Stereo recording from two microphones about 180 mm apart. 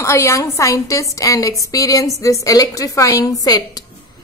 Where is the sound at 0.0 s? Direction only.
15° left (ahead or behind).